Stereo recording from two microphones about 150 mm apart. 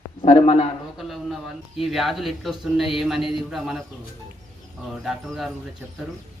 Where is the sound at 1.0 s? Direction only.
Centre (ahead or behind).